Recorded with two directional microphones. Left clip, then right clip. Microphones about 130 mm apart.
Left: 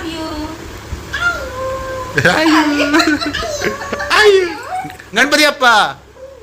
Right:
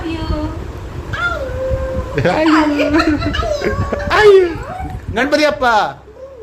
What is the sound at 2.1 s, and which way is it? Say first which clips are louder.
A woman's voice: left 2 dB; 5° right (ahead or behind).